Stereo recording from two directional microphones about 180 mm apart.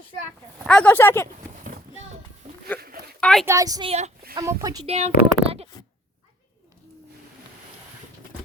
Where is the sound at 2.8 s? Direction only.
55° right (ahead or behind).